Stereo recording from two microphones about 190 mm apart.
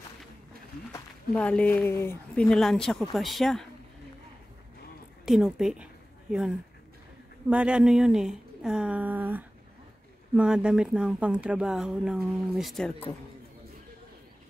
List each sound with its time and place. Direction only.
1.3 s speech: 5° left (ahead or behind)
5.2 s speech: centre (ahead or behind)
7.4 s speech: 5° right (ahead or behind)